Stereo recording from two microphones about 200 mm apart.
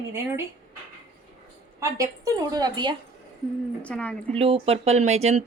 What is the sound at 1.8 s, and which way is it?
A woman's voice, 15° right (ahead or behind).